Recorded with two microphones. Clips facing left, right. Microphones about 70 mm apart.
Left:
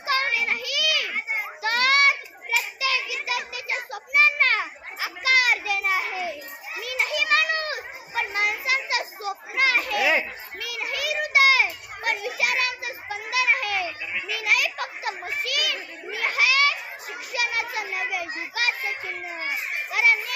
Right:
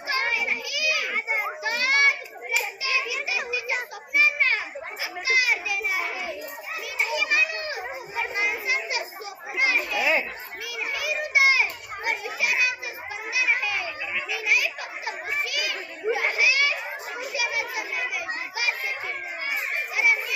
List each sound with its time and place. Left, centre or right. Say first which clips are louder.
0.1 s children playing: left 2 dB; left
1.0 s children playing: right 2 dB; centre
1.6 s children playing: left 3 dB; left
3.2 s a sound: right 1 dB; left
4.1 s children playing: left 2 dB; left
14.4 s a sound: left 2 dB; left
16.3 s belly laugh: left 2 dB; left
17.2 s children playing: left 2 dB; left
19.9 s children playing: left 3 dB; left